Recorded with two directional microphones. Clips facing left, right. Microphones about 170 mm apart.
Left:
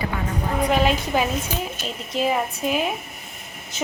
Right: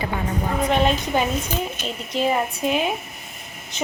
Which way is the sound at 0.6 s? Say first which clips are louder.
Even; 5° left (ahead or behind).